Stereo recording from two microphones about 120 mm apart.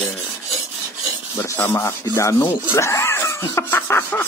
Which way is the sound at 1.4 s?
20° left (ahead or behind).